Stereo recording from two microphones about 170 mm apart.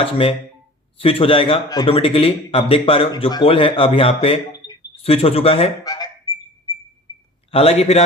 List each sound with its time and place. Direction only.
0.0 s a man's voice: 30° left (ahead or behind)
5.0 s a man's voice: 35° left (ahead or behind)
5.8 s honk: 20° left (ahead or behind)
7.5 s a man's voice: 35° left (ahead or behind)